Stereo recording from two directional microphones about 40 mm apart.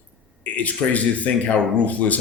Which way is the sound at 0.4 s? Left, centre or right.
Left.